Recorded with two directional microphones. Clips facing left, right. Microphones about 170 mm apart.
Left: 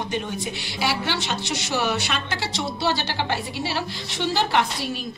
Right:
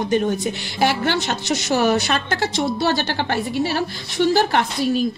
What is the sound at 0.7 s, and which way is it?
Speech, 50° right (ahead or behind).